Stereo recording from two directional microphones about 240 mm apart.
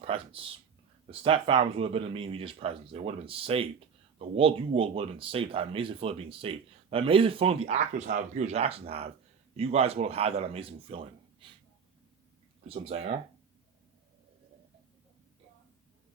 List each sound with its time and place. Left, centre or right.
0.0 s speech: right
12.6 s speech: right